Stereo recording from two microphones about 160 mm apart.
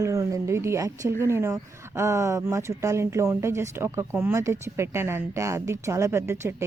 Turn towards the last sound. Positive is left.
turn(degrees=-15)  # may be behind; listen again after turning